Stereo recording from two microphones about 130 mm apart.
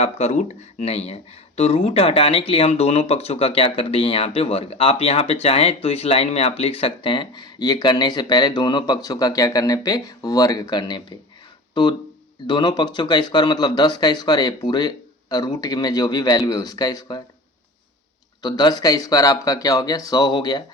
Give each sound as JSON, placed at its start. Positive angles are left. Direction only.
{"t": 0.0, "sound": "speech", "side_deg": 55}
{"t": 18.4, "sound": "speech", "side_deg": 30}